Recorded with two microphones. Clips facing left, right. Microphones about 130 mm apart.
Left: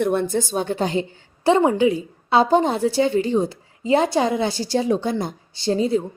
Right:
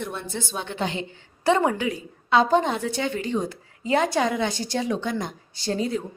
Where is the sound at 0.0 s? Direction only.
55° left (ahead or behind).